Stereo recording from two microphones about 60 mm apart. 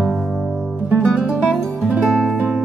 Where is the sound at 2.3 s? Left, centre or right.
Right.